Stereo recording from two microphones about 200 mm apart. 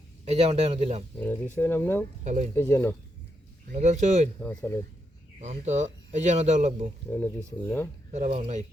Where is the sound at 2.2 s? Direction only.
35° right (ahead or behind).